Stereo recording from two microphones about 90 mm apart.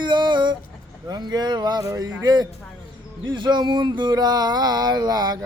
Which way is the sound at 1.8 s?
35° right (ahead or behind).